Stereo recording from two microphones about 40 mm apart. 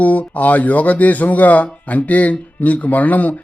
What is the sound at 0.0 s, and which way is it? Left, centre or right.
Speech, left.